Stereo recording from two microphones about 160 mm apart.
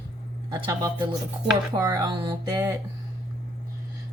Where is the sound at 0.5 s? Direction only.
30° right (ahead or behind).